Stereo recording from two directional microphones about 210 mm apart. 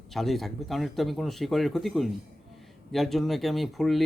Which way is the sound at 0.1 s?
Centre (ahead or behind).